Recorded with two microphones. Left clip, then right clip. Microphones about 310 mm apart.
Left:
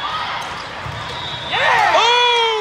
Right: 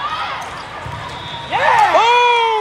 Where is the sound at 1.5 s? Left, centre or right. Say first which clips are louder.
Right 2 dB; right.